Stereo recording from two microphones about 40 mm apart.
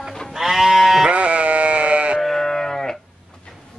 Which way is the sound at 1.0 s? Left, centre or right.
Right.